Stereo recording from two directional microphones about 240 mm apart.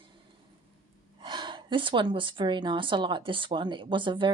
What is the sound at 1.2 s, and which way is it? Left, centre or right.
A woman's voice, centre.